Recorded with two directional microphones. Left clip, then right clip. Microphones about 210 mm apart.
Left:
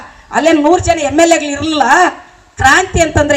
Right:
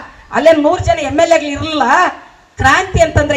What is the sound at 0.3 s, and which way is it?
A woman's voice, 35° left (ahead or behind).